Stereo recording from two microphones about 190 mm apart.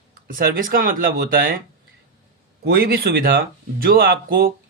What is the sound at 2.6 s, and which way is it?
A man's voice, 55° right (ahead or behind).